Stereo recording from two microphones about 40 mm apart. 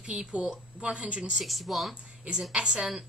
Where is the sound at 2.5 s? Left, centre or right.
Right.